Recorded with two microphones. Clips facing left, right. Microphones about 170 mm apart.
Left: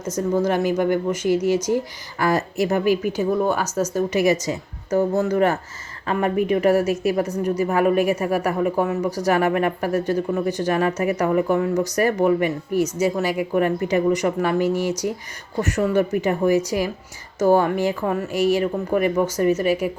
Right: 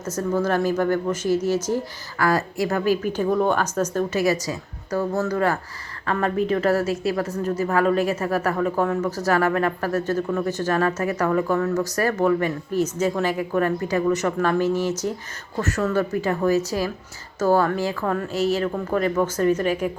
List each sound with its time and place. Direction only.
0.2 s a woman's voice: 15° left (ahead or behind)